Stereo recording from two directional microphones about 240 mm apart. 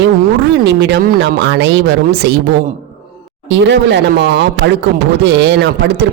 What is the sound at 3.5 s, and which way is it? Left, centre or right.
Speech, right.